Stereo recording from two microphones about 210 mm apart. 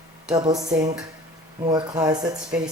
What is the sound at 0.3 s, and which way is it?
Speech, 20° right (ahead or behind).